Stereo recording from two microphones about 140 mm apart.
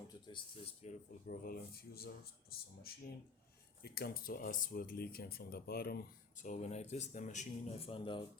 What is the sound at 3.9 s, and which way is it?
Speech, 90° left.